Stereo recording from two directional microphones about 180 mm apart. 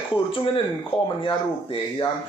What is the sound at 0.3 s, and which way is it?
Speech, 30° left (ahead or behind).